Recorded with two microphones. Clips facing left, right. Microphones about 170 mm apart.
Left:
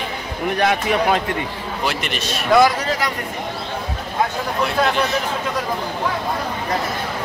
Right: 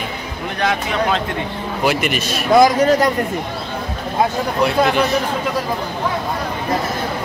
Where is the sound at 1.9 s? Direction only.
5° right (ahead or behind).